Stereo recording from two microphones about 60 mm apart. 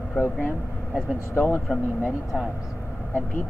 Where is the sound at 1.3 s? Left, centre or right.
Left.